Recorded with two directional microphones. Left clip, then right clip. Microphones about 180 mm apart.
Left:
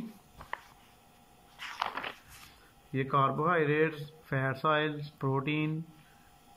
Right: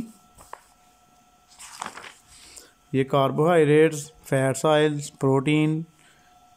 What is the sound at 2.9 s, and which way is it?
A man's voice, 35° right (ahead or behind).